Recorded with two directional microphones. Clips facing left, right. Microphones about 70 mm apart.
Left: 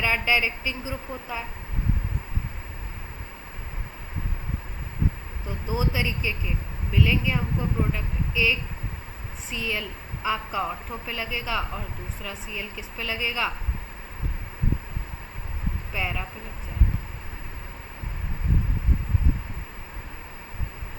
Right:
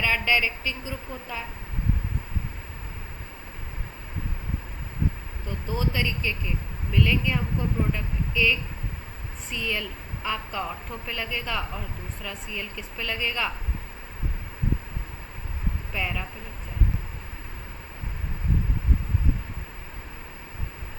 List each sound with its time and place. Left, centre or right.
0.0 s a woman's voice: centre
5.5 s a woman's voice: centre
15.9 s a woman's voice: centre